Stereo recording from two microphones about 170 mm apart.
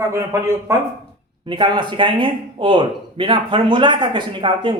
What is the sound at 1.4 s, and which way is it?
Speech, 30° right (ahead or behind).